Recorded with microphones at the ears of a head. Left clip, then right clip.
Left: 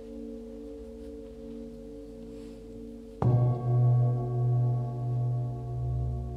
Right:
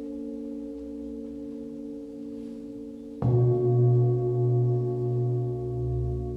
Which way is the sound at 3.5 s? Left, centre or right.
Right.